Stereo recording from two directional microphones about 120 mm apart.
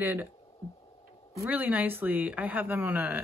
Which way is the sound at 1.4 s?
15° right (ahead or behind).